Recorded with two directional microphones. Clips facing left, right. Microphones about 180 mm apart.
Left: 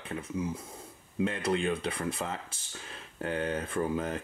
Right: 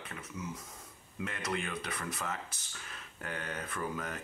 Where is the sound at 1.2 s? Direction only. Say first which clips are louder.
Left 8 dB; 30° left (ahead or behind).